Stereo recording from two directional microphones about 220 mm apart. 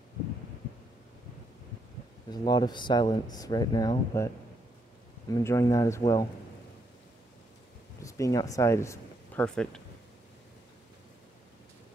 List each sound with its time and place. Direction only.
2.3 s speech: 20° left (ahead or behind)
5.3 s speech: 15° left (ahead or behind)
8.0 s speech: 15° left (ahead or behind)